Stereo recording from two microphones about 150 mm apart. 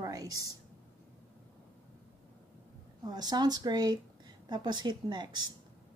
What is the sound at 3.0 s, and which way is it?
A woman's voice, 25° right (ahead or behind).